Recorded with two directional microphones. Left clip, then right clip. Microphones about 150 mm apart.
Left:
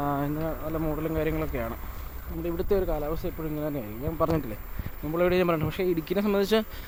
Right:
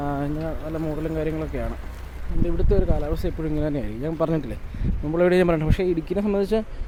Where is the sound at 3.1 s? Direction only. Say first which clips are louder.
Right 5 dB; 30° right (ahead or behind).